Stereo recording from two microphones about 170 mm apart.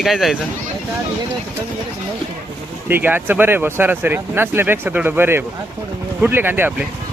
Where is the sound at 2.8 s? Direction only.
10° right (ahead or behind).